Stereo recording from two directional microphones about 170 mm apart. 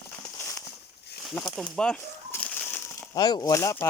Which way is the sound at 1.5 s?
Centre (ahead or behind).